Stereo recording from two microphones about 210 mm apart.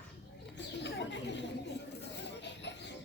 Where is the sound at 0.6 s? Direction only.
55° left (ahead or behind).